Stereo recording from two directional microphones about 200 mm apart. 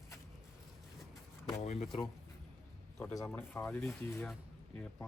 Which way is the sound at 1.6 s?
35° left (ahead or behind).